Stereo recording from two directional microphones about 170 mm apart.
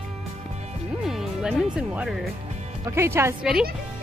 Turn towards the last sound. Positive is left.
turn(degrees=-15)  # may be behind; listen again after turning